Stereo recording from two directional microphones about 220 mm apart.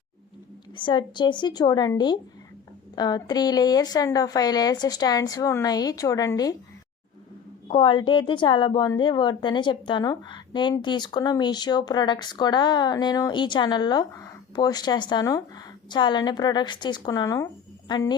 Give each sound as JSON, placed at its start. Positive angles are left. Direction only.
{"t": 0.8, "sound": "a woman's voice", "side_deg": 20}
{"t": 7.7, "sound": "a woman's voice", "side_deg": 20}